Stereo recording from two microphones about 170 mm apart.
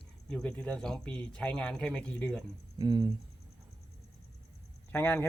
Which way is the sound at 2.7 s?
25° right (ahead or behind).